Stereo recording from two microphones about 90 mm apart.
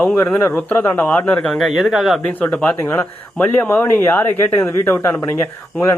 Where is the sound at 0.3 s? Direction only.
20° left (ahead or behind).